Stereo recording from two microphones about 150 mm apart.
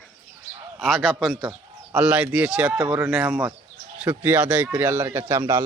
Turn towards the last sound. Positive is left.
turn(degrees=-15)  # may be behind; listen again after turning